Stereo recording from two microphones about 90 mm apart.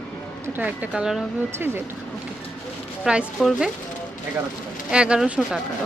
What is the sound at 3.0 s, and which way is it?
Speech, 10° right (ahead or behind).